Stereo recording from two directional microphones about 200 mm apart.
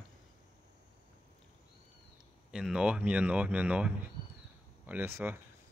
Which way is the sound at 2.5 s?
5° right (ahead or behind).